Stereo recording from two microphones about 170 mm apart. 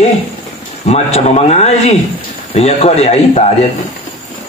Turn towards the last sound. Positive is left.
turn(degrees=40)  # may be behind; listen again after turning